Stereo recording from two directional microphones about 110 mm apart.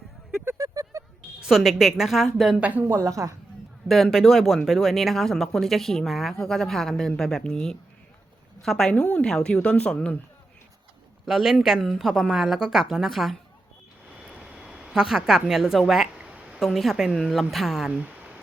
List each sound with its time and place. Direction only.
0.4 s a sound: 30° right (ahead or behind)
1.4 s speech: 5° right (ahead or behind)
2.6 s speech: 15° right (ahead or behind)
2.8 s a woman's voice: 25° right (ahead or behind)
3.8 s a woman's voice: centre (ahead or behind)
11.3 s a woman's voice: 5° right (ahead or behind)